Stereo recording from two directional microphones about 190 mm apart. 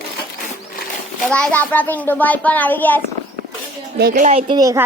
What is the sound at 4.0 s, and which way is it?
Speech, 55° right (ahead or behind).